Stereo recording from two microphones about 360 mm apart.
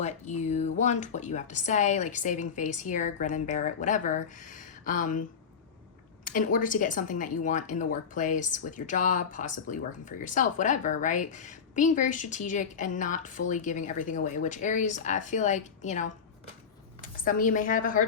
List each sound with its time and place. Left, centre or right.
0.0 s a woman's voice: centre
6.2 s a woman's voice: left